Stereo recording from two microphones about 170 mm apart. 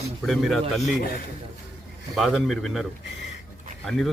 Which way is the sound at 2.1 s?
Centre (ahead or behind).